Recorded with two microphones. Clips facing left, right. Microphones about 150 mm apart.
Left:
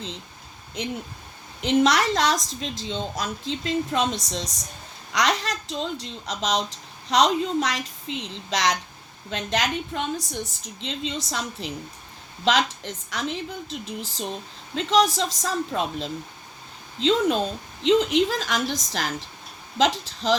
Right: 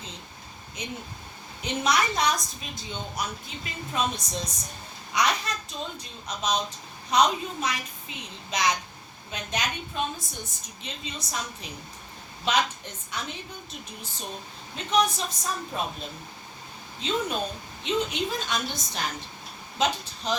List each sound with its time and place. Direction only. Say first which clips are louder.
1.6 s a woman's voice: left 6 dB; 90° left